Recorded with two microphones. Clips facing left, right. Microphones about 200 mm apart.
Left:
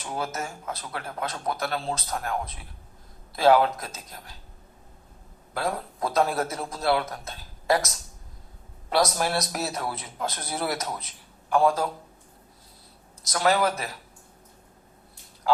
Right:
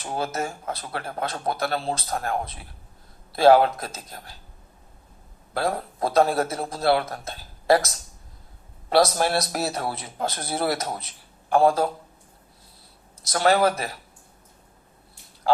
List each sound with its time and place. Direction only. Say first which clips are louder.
0.1 s speech: right 4 dB; 30° right (ahead or behind)
5.5 s speech: right 3 dB; 30° right (ahead or behind)
8.9 s speech: right 4 dB; 30° right (ahead or behind)
13.3 s speech: right 3 dB; 30° right (ahead or behind)